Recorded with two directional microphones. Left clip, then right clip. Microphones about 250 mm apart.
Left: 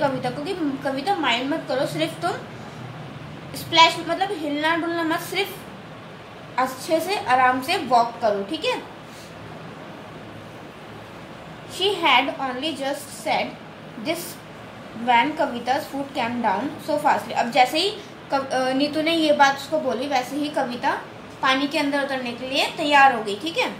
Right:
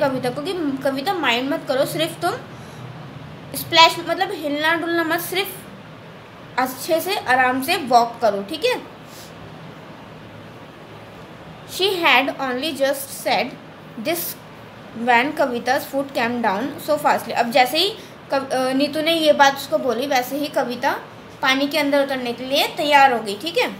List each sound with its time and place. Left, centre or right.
0.0 s a woman's voice: right
3.5 s a woman's voice: right
6.5 s a woman's voice: right
11.7 s a woman's voice: right
18.3 s a woman's voice: right